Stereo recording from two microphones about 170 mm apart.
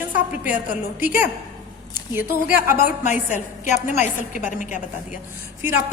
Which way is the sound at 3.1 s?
45° left (ahead or behind).